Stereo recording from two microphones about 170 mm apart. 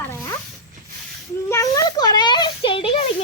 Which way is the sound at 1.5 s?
20° left (ahead or behind).